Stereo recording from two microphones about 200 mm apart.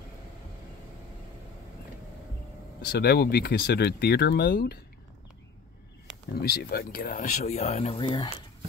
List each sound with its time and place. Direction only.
2.8 s speech: 55° left (ahead or behind)
6.3 s speech: 50° left (ahead or behind); by 8.3 s 25° left (ahead or behind)